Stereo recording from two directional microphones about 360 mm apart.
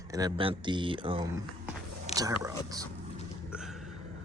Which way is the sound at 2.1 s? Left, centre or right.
Centre.